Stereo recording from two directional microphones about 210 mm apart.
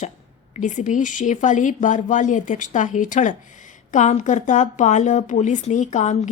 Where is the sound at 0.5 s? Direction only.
35° left (ahead or behind).